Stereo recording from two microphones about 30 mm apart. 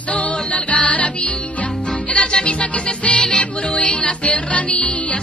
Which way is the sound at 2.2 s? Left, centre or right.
Left.